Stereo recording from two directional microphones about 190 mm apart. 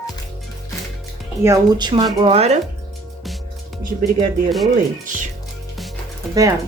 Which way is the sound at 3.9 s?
35° right (ahead or behind).